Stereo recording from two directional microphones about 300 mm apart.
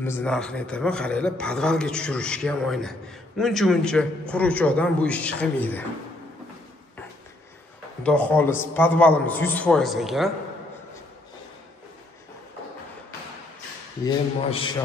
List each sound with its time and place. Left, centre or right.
0.0 s a man's voice: centre
8.0 s a man's voice: centre
14.0 s speech: centre